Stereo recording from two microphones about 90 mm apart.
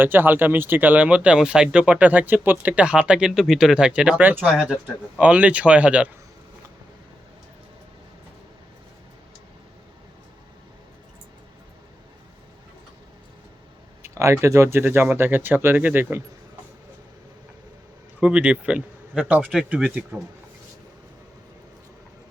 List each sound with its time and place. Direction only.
0.0 s speech: 20° right (ahead or behind)
14.0 s speech: 35° right (ahead or behind)
18.2 s speech: 10° right (ahead or behind)